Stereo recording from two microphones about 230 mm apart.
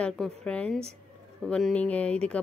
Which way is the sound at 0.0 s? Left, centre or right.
Centre.